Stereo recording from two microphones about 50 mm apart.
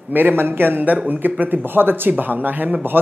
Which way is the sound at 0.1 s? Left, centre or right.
Right.